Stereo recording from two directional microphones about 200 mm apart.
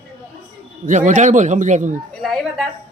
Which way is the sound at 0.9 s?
40° right (ahead or behind).